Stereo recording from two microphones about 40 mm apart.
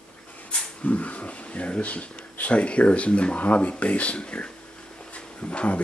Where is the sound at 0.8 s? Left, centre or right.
Left.